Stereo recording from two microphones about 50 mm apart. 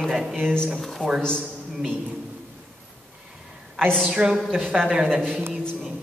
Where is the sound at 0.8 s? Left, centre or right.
Centre.